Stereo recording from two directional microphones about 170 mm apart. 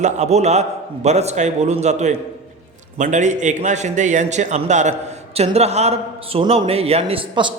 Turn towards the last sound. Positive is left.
turn(degrees=-35)  # may be behind; listen again after turning